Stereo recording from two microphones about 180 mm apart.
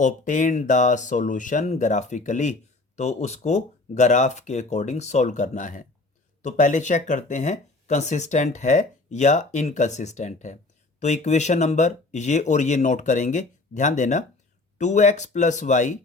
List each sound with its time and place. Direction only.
0.0 s speech: 45° left (ahead or behind)